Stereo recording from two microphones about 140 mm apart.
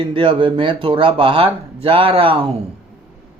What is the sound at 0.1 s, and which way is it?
Speech, 35° right (ahead or behind).